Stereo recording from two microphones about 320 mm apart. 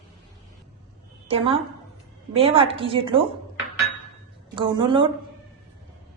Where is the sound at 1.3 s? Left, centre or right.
Centre.